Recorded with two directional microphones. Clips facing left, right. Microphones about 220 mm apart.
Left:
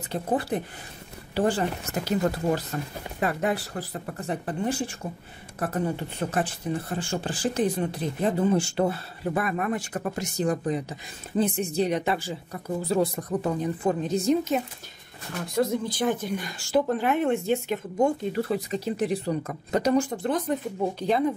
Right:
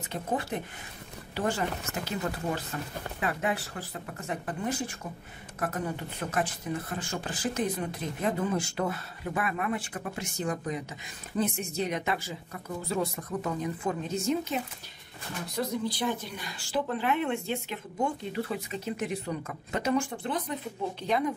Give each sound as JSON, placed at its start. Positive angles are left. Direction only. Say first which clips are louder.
{"t": 0.1, "sound": "speech", "louder": "left 5 dB", "side_deg": 35}
{"t": 15.5, "sound": "speech", "louder": "left 6 dB", "side_deg": 50}